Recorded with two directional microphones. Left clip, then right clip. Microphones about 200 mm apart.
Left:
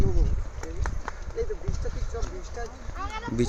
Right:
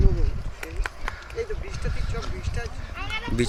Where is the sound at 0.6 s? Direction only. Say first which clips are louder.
Right 4 dB; 25° right (ahead or behind).